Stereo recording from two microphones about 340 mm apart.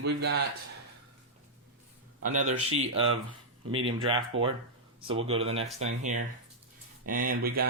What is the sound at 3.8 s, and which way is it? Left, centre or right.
Speech, centre.